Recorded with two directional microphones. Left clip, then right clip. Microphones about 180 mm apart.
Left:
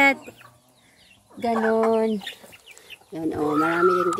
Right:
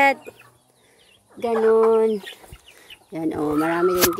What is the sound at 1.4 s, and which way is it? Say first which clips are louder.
A woman's voice: right 4 dB; 45° right (ahead or behind).